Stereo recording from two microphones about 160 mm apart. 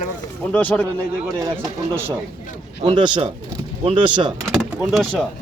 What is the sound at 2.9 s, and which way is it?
Speech, 30° right (ahead or behind).